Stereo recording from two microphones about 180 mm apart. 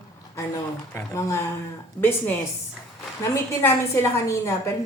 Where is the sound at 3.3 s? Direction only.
15° left (ahead or behind).